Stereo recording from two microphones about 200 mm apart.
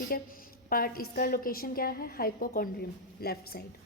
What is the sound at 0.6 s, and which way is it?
A woman's voice, 45° left (ahead or behind).